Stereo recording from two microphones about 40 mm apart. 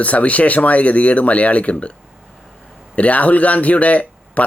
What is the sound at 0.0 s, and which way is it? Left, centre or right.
Speech, left.